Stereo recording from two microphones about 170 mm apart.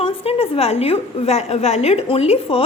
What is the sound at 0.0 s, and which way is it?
A woman's voice, 35° left (ahead or behind).